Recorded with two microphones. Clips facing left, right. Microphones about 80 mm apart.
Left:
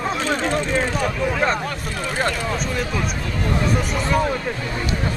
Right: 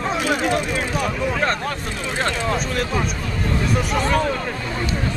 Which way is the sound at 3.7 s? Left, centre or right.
Centre.